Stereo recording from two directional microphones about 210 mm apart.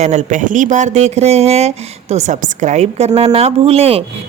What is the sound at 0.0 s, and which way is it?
Speech, 35° right (ahead or behind).